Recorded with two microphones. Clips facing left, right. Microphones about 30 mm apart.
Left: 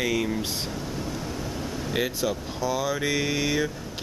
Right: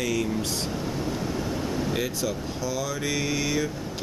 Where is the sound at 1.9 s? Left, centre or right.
Centre.